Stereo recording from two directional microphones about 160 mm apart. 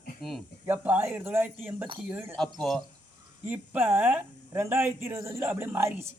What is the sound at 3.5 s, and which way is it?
Speech, 10° right (ahead or behind).